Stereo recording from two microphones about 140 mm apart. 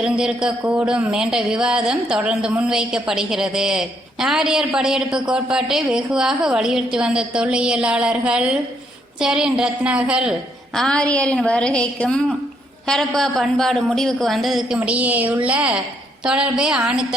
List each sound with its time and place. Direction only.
0.0 s speech: 5° right (ahead or behind)
10.8 s a woman's voice: 5° left (ahead or behind)